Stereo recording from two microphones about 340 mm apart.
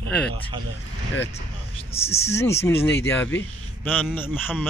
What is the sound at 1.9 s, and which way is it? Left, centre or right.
A man's voice, centre.